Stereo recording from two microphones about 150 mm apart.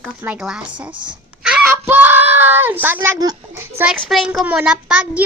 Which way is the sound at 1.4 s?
5° right (ahead or behind).